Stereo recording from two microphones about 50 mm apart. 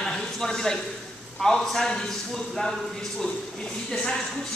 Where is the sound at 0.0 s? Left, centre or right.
Centre.